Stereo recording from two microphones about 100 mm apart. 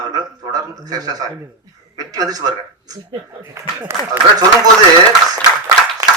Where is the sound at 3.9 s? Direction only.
25° right (ahead or behind).